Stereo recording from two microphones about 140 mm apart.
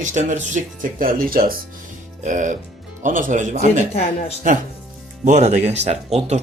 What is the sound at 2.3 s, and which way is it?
A man's voice, 60° right (ahead or behind).